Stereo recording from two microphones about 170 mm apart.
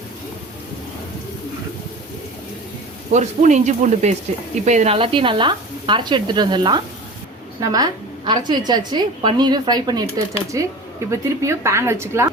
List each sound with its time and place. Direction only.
3.1 s a woman's voice: 45° right (ahead or behind); by 12.3 s 15° right (ahead or behind)